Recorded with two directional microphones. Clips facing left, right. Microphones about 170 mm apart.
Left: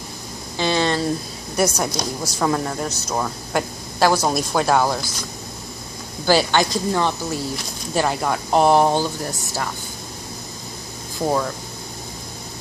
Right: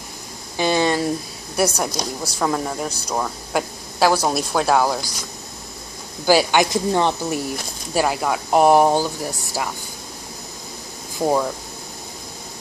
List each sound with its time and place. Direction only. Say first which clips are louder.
0.6 s a sound: right 2 dB; 15° right (ahead or behind)
1.6 s speech: even; 10° right (ahead or behind)
6.2 s speech: right 1 dB; 10° right (ahead or behind)
7.9 s speech: right 1 dB; 5° right (ahead or behind)
11.2 s speech: right 2 dB; 10° right (ahead or behind)